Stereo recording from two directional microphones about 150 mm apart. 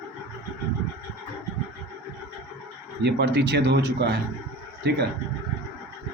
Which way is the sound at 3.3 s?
90° right.